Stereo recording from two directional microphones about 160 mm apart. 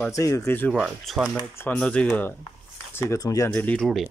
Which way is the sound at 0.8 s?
5° right (ahead or behind).